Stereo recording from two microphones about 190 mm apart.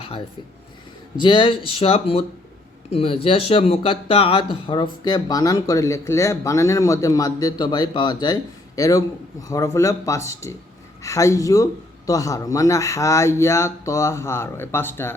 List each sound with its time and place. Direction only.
1.2 s speech: 25° left (ahead or behind)